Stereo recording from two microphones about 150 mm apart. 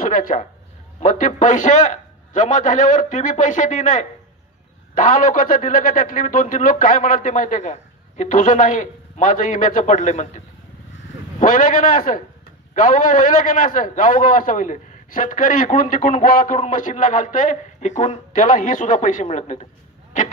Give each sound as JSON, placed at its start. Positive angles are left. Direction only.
{"t": 0.0, "sound": "a man's voice", "side_deg": 60}